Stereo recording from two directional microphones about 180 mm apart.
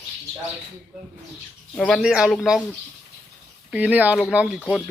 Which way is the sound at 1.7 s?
Centre (ahead or behind).